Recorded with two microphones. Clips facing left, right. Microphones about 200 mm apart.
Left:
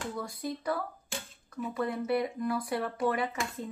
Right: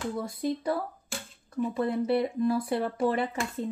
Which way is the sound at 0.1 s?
25° right (ahead or behind).